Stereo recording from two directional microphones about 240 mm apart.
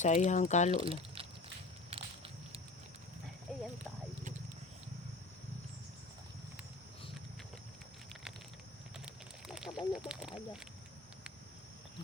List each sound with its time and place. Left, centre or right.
0.0 s speech: left
0.7 s speech: right
1.9 s a sound: right
9.5 s speech: centre